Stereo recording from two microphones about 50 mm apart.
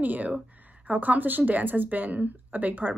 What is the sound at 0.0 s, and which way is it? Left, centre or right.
Speech, right.